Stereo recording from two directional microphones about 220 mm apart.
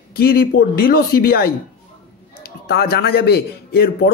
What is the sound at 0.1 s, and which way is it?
Speech, 45° left (ahead or behind).